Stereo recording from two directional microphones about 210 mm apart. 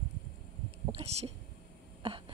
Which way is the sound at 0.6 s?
25° right (ahead or behind).